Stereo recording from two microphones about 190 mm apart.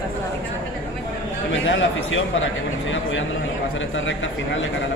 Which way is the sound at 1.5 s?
85° left.